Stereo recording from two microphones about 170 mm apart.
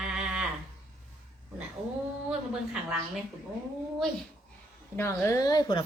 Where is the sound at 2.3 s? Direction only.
5° right (ahead or behind).